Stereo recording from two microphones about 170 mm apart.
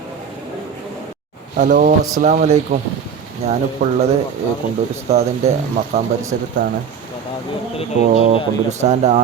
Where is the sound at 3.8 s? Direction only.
50° right (ahead or behind).